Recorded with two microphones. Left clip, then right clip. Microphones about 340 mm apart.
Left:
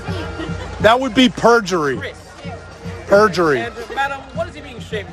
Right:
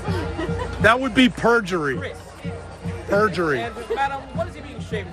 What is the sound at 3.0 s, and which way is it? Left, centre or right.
Speech, centre.